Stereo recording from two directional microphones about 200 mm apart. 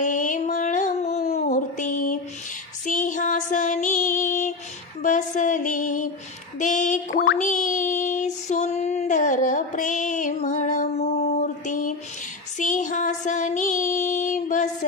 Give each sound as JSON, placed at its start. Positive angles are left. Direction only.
{"t": 0.0, "sound": "a sound", "side_deg": 40}
{"t": 2.9, "sound": "child singing", "side_deg": 40}
{"t": 5.0, "sound": "music", "side_deg": 40}
{"t": 6.6, "sound": "a sound", "side_deg": 40}
{"t": 7.3, "sound": "female singing", "side_deg": 40}
{"t": 12.5, "sound": "music", "side_deg": 40}